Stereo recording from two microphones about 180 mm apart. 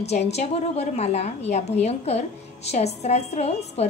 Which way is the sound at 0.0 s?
35° left (ahead or behind).